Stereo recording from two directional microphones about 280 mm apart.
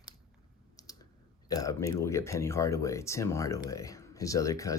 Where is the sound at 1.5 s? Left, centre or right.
Centre.